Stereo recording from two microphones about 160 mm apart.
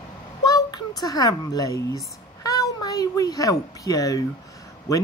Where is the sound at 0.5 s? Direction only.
25° left (ahead or behind).